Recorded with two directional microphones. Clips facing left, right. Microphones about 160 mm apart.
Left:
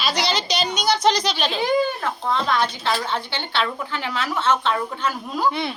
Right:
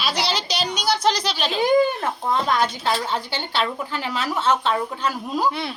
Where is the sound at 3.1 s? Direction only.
40° right (ahead or behind).